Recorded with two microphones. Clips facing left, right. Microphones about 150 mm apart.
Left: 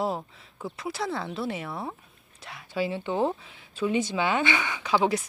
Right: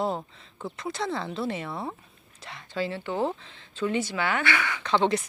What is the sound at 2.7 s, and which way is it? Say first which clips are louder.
Speech: left 2 dB; 15° left (ahead or behind).